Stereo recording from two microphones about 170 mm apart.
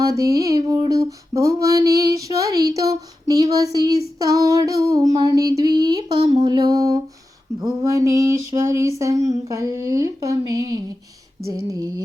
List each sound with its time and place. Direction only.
0.1 s child singing: 20° right (ahead or behind)